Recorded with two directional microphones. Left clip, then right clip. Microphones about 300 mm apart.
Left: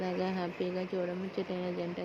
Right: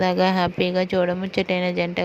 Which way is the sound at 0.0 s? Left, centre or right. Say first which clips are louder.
Right 15 dB; right.